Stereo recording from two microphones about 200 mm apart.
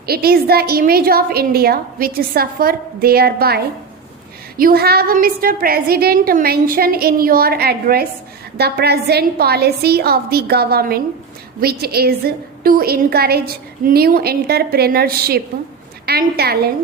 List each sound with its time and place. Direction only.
0.0 s a woman's voice: 50° right (ahead or behind)